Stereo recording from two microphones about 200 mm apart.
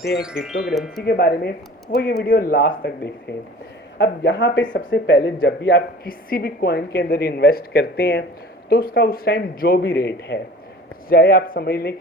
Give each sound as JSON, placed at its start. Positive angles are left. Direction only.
{"t": 0.2, "sound": "speech", "side_deg": -5}
{"t": 1.0, "sound": "a woman's voice", "side_deg": 50}